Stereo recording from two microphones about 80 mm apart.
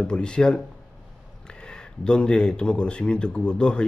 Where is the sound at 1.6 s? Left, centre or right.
Centre.